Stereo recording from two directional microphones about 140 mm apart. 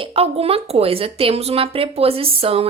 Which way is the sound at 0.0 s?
40° right (ahead or behind).